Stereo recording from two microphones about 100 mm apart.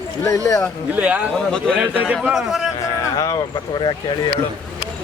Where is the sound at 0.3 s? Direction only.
35° left (ahead or behind).